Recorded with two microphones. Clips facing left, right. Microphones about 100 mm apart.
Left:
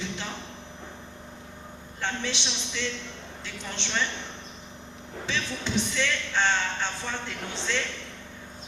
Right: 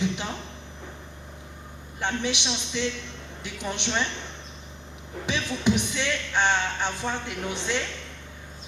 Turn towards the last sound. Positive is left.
turn(degrees=-15)  # may be behind; listen again after turning